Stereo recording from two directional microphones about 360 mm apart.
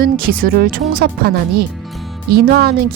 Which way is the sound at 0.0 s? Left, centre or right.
Right.